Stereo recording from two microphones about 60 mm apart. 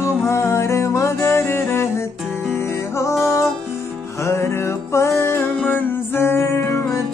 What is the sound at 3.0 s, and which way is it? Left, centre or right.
Music, left.